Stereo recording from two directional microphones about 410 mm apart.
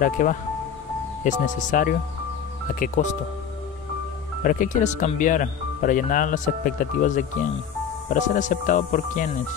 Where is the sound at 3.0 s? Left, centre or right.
Centre.